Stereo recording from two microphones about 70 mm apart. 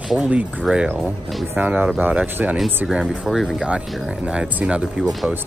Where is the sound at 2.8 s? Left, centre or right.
Centre.